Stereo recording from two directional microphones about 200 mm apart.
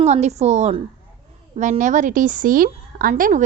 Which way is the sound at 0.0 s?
35° right (ahead or behind).